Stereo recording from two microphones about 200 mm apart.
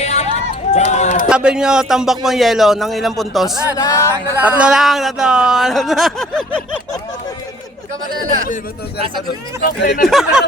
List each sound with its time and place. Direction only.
0.0 s a sound: 35° left (ahead or behind)
1.3 s a man's voice: 5° right (ahead or behind)
3.8 s speech: 15° left (ahead or behind)
4.3 s a man's voice: 5° right (ahead or behind)
9.6 s speech: 45° left (ahead or behind)
10.0 s a man's voice: centre (ahead or behind)